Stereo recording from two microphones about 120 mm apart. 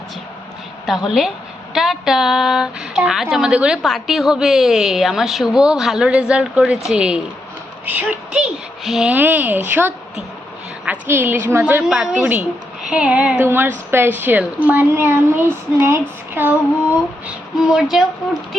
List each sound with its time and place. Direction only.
0.9 s a woman's voice: 5° right (ahead or behind)
8.8 s a woman's voice: centre (ahead or behind)
9.1 s a woman's voice: 15° right (ahead or behind)
11.1 s a woman's voice: 15° right (ahead or behind)
17.2 s a sound: 5° right (ahead or behind)